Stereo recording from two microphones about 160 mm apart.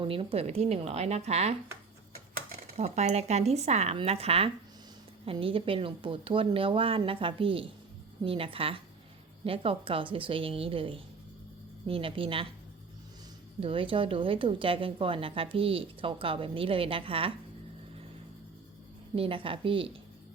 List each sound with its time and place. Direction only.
0.0 s a woman's voice: 35° right (ahead or behind)
2.7 s a woman's voice: 45° right (ahead or behind)
13.6 s a woman's voice: 35° right (ahead or behind)
19.1 s a woman's voice: 35° right (ahead or behind)